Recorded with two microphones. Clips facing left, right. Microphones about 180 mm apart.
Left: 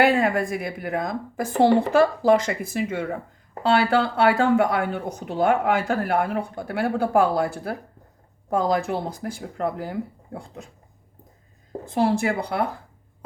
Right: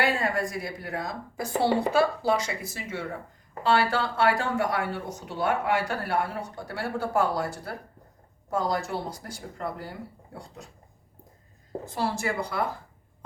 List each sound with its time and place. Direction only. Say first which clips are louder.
0.0 s speech: left 7 dB; 55° left (ahead or behind)
11.9 s speech: left 8 dB; 55° left (ahead or behind)